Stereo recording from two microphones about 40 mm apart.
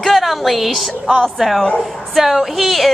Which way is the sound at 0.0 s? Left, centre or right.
Centre.